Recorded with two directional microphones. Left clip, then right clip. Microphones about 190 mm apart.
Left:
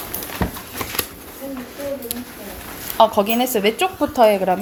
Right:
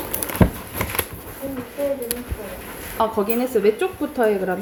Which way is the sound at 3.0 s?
25° left (ahead or behind).